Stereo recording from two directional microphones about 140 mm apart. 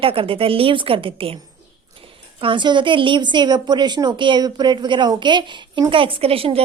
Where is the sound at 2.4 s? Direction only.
35° right (ahead or behind).